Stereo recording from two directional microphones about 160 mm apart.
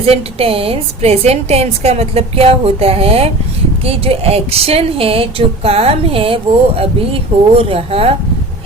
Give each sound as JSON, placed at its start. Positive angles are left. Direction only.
{"t": 0.0, "sound": "speech", "side_deg": -35}